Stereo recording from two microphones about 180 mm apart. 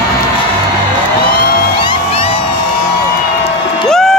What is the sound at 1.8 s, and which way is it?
Music, 30° left (ahead or behind).